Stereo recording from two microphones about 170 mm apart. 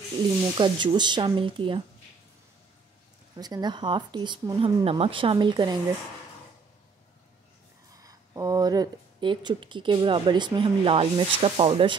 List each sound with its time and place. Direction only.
0.6 s speech: 25° right (ahead or behind)
3.3 s speech: 25° right (ahead or behind)
7.9 s speech: 20° right (ahead or behind)